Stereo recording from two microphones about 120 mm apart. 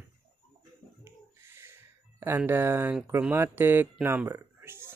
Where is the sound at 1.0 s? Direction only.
20° right (ahead or behind).